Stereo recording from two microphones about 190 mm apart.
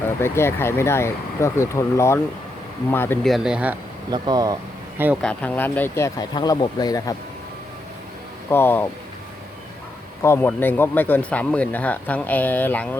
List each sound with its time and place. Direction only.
0.2 s speech: 15° left (ahead or behind)
3.2 s speech: centre (ahead or behind)
4.1 s speech: 20° right (ahead or behind)
5.2 s speech: 5° left (ahead or behind)
8.4 s speech: 10° left (ahead or behind)
10.2 s speech: 10° left (ahead or behind)